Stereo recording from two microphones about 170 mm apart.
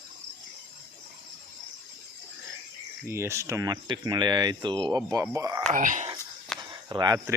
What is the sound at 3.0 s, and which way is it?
Speech, 15° right (ahead or behind).